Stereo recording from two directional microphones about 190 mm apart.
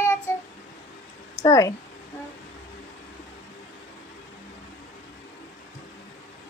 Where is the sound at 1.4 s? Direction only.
15° left (ahead or behind).